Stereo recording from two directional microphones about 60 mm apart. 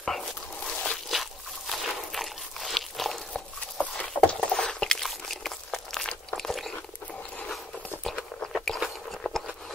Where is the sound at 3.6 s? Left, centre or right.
Left.